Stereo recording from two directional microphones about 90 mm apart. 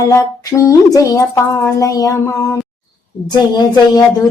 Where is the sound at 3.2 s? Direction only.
50° left (ahead or behind).